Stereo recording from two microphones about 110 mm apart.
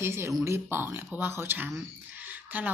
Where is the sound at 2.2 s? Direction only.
15° right (ahead or behind).